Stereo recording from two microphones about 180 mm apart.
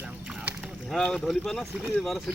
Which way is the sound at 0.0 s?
5° right (ahead or behind).